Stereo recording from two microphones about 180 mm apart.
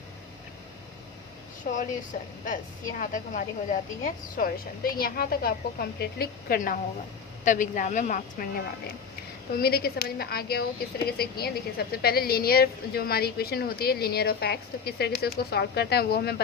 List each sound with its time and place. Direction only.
1.6 s a woman's voice: 50° left (ahead or behind)
9.6 s a woman's voice: 60° left (ahead or behind)